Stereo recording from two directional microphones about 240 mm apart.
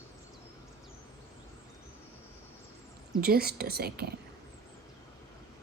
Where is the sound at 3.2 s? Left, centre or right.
Right.